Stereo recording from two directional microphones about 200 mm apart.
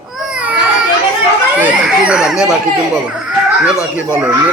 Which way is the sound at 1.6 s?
5° right (ahead or behind).